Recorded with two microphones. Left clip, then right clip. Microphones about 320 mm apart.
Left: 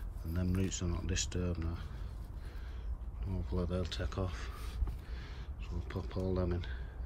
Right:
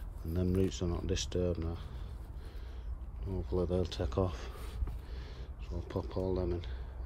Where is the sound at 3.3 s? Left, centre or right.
Centre.